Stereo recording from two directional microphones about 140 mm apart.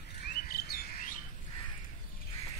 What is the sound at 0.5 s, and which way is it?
Bird, 90° left.